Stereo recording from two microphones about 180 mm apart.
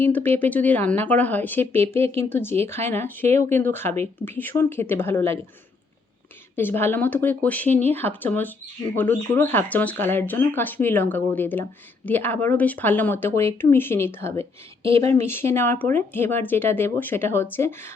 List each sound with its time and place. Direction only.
0.0 s speech: 10° left (ahead or behind)
6.6 s speech: 10° left (ahead or behind)
14.8 s speech: 30° right (ahead or behind)
15.1 s speech: 15° left (ahead or behind)